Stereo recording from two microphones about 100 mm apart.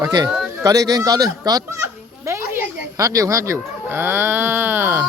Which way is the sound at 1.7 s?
30° right (ahead or behind).